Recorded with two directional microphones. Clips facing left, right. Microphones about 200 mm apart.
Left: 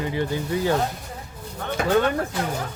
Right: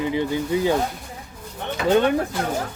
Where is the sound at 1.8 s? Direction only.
20° right (ahead or behind).